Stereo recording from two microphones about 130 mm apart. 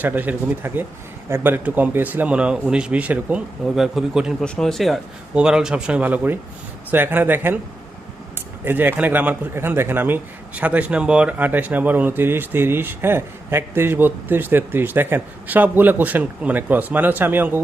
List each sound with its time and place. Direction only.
0.0 s a man's voice: 15° right (ahead or behind)
8.6 s a man's voice: 15° right (ahead or behind)